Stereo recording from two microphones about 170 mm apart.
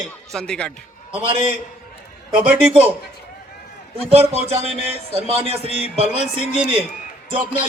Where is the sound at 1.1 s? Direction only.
35° right (ahead or behind).